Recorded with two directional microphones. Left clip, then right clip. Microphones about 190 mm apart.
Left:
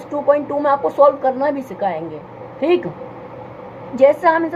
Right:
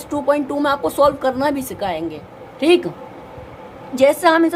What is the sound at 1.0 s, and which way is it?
A woman's voice, 30° right (ahead or behind).